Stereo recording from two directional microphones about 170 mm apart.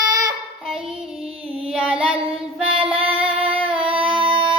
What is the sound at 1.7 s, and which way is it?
Child singing, 5° right (ahead or behind).